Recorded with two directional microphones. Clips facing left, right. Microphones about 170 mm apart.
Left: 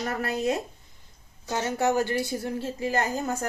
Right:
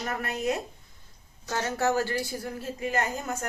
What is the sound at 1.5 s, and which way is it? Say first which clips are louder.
A woman's voice: left 2 dB; 15° left (ahead or behind).